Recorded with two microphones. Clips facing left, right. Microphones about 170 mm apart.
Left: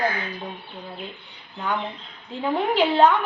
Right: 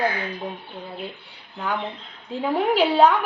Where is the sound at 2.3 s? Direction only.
10° right (ahead or behind).